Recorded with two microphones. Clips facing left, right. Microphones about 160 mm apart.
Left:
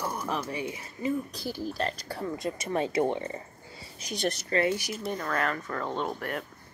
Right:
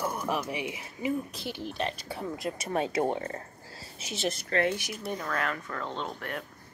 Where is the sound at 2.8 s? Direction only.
15° right (ahead or behind).